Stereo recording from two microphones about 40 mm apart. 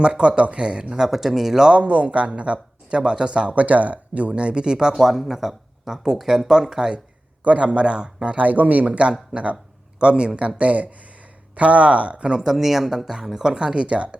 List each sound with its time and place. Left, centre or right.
0.0 s speech: right
0.9 s speech: centre
1.7 s speech: right
4.9 s speech: centre
7.4 s speech: right
8.4 s speech: right